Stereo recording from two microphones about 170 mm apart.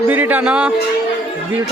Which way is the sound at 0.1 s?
10° right (ahead or behind).